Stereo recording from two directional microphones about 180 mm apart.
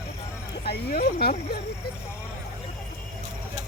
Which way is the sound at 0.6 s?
60° left (ahead or behind).